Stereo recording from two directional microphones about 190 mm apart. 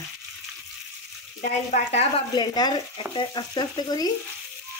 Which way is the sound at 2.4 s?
20° left (ahead or behind).